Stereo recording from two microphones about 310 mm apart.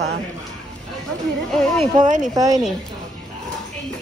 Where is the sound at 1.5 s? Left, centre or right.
Centre.